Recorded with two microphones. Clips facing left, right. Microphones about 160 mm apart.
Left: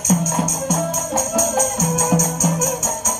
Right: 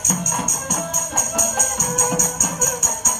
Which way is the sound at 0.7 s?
35° left (ahead or behind).